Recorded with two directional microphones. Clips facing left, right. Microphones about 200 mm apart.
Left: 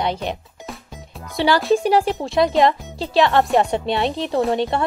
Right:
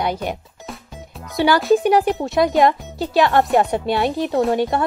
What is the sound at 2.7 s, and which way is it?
Speech, 25° left (ahead or behind).